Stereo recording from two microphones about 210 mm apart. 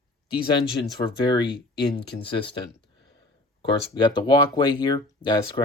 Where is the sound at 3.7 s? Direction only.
20° left (ahead or behind).